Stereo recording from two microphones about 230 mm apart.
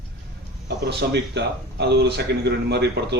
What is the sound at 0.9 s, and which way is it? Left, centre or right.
A man's voice, right.